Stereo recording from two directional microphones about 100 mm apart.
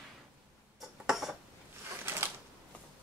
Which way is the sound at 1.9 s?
25° right (ahead or behind).